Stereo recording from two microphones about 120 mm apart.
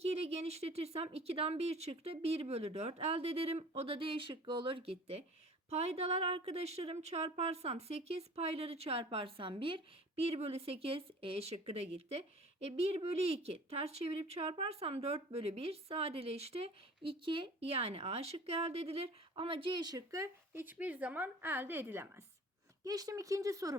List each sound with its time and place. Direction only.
0.0 s speech: 60° right (ahead or behind); by 22.2 s 20° right (ahead or behind)
22.8 s speech: 30° right (ahead or behind)